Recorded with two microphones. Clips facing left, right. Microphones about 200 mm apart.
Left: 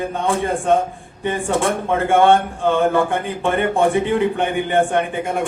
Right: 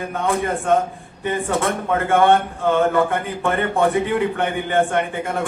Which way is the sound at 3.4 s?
25° left (ahead or behind).